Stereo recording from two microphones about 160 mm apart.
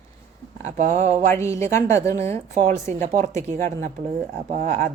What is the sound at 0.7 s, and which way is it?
Speech, 45° right (ahead or behind).